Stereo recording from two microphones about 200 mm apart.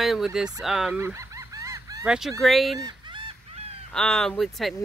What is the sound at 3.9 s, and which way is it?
Speech, 5° left (ahead or behind).